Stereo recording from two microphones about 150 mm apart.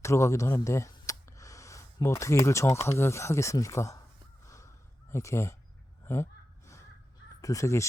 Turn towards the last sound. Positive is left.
turn(degrees=20)  # may be behind; listen again after turning